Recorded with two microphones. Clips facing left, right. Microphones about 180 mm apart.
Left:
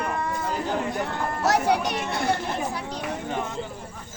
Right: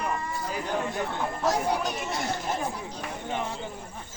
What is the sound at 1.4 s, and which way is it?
Speech, 75° left (ahead or behind).